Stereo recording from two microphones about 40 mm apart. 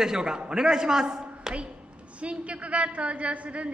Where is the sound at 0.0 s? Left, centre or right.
Centre.